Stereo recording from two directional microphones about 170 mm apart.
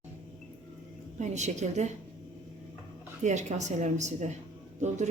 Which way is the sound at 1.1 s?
45° right (ahead or behind).